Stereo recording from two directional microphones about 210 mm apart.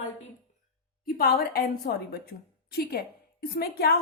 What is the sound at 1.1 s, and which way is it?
A woman's voice, 45° left (ahead or behind).